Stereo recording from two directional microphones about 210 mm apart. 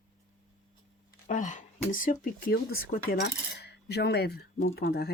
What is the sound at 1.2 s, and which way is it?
Speech, 35° left (ahead or behind).